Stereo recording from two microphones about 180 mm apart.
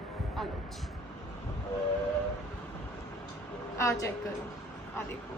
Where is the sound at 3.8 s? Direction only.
15° left (ahead or behind).